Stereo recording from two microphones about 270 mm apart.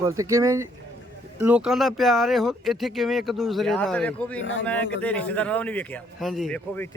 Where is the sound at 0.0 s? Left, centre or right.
Centre.